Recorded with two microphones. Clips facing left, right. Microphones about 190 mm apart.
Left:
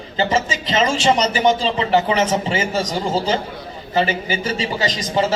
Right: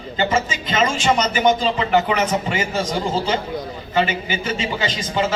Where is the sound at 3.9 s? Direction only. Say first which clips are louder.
Left 1 dB; 40° left (ahead or behind).